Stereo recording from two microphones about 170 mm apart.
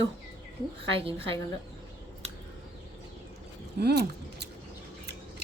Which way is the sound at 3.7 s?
75° right (ahead or behind).